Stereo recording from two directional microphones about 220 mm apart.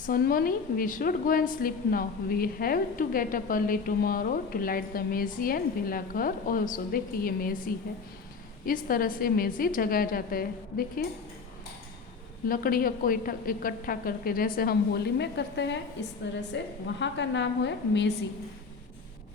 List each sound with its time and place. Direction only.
0.1 s a woman's voice: 40° left (ahead or behind)
12.5 s a woman's voice: 40° left (ahead or behind)
16.8 s a woman's voice: 55° left (ahead or behind)